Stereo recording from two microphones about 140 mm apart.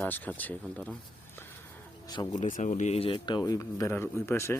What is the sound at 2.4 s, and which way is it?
Speech, 65° left (ahead or behind).